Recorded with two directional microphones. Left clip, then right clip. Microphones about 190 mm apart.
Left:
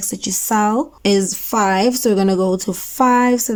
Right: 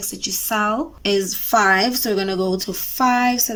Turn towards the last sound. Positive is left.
turn(degrees=35)  # may be behind; listen again after turning